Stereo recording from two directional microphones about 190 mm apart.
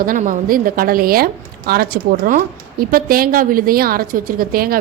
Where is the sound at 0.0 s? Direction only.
45° right (ahead or behind).